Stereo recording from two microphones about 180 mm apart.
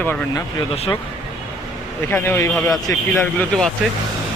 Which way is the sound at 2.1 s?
15° left (ahead or behind).